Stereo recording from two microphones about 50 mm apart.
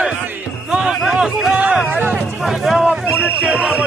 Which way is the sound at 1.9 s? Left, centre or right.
Right.